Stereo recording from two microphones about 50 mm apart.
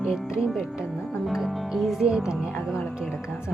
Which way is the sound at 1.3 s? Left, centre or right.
Centre.